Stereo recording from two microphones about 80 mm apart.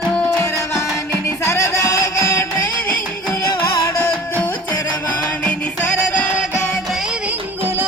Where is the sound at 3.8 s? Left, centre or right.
Left.